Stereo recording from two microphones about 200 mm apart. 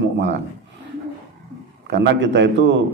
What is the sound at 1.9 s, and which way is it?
Speech, 60° right (ahead or behind).